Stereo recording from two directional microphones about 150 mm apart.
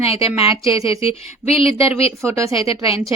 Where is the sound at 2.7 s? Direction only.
40° left (ahead or behind).